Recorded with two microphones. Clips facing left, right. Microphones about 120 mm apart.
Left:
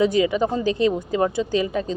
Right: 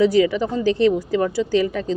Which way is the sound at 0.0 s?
20° left (ahead or behind).